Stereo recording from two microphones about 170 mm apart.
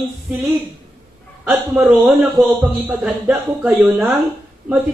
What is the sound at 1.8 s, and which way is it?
Speech, 5° right (ahead or behind).